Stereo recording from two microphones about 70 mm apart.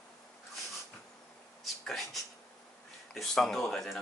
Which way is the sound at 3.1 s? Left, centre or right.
Centre.